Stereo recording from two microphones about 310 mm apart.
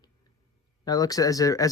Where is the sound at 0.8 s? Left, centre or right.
Centre.